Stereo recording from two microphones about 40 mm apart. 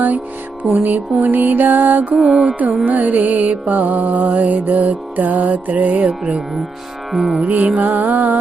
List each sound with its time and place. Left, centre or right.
0.7 s music: right
2.3 s music: centre
2.8 s music: right
7.1 s music: centre
7.4 s music: right